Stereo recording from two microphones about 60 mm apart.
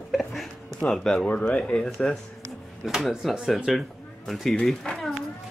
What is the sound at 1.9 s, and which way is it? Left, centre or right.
Speech, centre.